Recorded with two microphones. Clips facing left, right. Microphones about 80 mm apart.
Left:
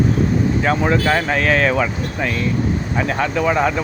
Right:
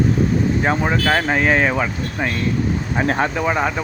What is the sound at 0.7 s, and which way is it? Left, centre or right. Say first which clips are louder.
Speech: left 3 dB; right.